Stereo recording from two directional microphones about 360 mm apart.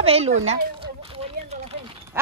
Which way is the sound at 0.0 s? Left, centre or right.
Centre.